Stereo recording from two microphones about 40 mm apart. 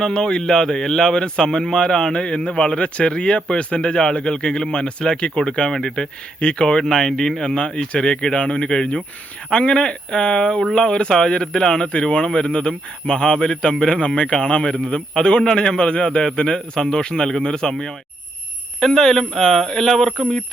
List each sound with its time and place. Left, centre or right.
0.0 s a man's voice: centre